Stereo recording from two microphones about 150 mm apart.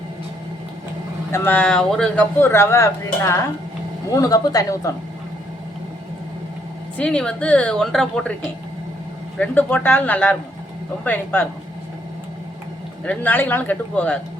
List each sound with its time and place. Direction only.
1.3 s speech: 10° left (ahead or behind)
2.4 s a woman's voice: 15° left (ahead or behind)
7.0 s speech: 5° left (ahead or behind)
9.4 s speech: 10° left (ahead or behind)
13.1 s speech: 10° left (ahead or behind)